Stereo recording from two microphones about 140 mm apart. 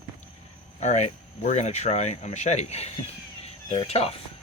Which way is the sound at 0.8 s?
55° left (ahead or behind).